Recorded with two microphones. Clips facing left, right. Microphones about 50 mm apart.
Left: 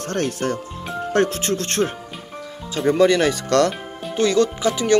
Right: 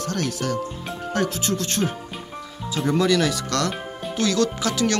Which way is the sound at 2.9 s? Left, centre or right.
Left.